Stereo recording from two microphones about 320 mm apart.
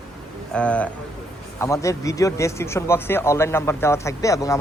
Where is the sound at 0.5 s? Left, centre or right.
Centre.